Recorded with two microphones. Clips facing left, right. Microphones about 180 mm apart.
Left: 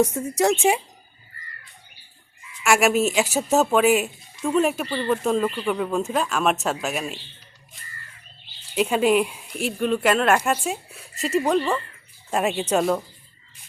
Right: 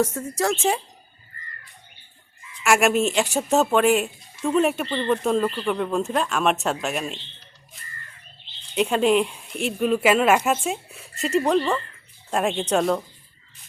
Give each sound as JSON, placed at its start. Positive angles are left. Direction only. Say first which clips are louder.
{"t": 0.0, "sound": "a woman's voice", "louder": "left 3 dB", "side_deg": 15}
{"t": 2.6, "sound": "speech", "louder": "even", "side_deg": 0}
{"t": 6.8, "sound": "a sound", "louder": "even", "side_deg": 0}
{"t": 8.4, "sound": "speech", "louder": "even", "side_deg": 5}